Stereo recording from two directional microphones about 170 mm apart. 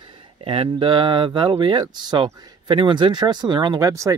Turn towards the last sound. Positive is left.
turn(degrees=-20)  # may be behind; listen again after turning